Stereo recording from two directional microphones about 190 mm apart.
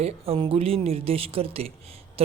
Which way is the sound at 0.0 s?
30° right (ahead or behind).